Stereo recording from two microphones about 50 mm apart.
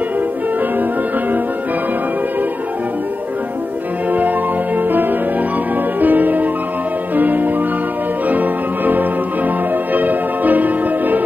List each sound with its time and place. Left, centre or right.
4.1 s music: right